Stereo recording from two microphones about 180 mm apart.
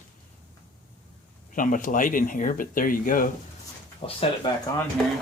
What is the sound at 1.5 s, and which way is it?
Speech, 50° left (ahead or behind).